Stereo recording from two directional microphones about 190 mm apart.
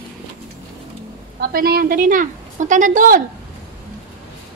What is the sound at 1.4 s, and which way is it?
A woman's voice, 55° right (ahead or behind).